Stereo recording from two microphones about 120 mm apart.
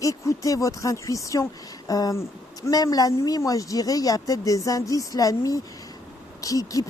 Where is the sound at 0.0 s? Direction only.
30° left (ahead or behind).